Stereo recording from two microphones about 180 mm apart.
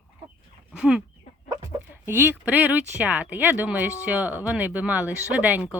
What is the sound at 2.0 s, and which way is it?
Speech, 10° right (ahead or behind).